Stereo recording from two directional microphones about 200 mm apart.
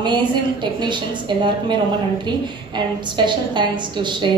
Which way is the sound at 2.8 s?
20° right (ahead or behind).